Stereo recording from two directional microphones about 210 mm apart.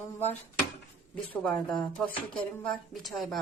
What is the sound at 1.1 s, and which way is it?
Speech, 5° left (ahead or behind).